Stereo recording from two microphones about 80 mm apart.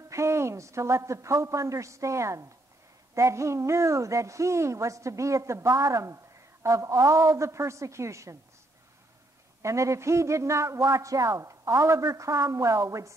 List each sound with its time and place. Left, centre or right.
0.1 s a woman's voice: right
9.6 s a woman's voice: right